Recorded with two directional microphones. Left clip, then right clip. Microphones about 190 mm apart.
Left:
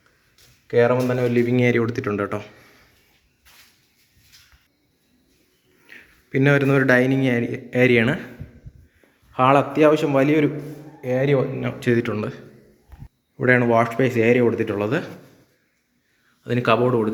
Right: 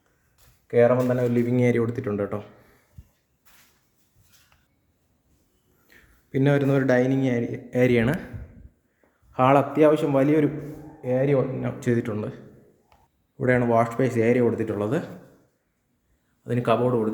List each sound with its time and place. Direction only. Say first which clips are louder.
0.7 s speech: left 1 dB; 10° right (ahead or behind)
5.9 s a man's voice: left 4 dB; 5° right (ahead or behind)
9.3 s speech: left 2 dB; 15° right (ahead or behind)
16.4 s a man's voice: left 4 dB; centre (ahead or behind)